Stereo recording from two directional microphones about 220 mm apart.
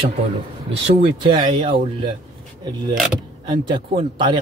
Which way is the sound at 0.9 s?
25° right (ahead or behind).